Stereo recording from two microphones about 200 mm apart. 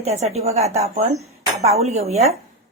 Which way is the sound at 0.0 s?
30° right (ahead or behind).